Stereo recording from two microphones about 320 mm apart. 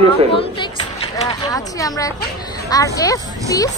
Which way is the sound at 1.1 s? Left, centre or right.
Centre.